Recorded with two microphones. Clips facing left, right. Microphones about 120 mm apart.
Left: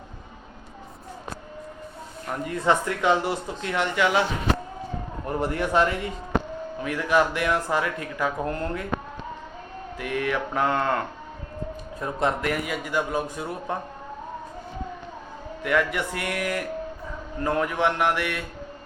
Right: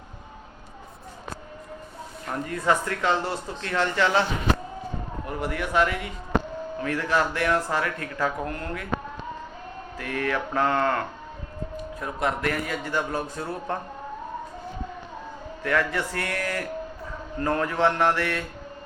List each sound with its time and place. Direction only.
2.5 s speech: 20° left (ahead or behind)
5.2 s a man's voice: 30° left (ahead or behind)
6.8 s speech: 15° left (ahead or behind)
10.0 s speech: 15° left (ahead or behind)
15.6 s speech: 15° left (ahead or behind)